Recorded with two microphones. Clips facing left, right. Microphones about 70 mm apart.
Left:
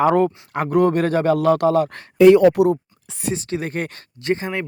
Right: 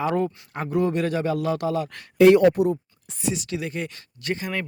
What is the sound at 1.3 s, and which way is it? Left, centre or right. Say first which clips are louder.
Speech: left 8 dB; left.